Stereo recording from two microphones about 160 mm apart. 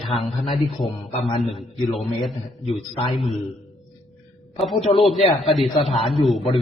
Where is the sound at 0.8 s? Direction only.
35° left (ahead or behind).